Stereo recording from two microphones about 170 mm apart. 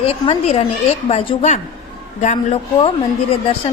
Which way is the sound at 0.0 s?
35° left (ahead or behind).